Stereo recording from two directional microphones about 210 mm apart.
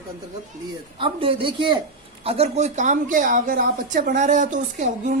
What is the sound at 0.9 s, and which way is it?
A woman's voice, 25° right (ahead or behind).